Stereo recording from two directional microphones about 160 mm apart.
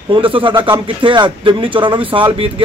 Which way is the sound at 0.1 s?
30° right (ahead or behind).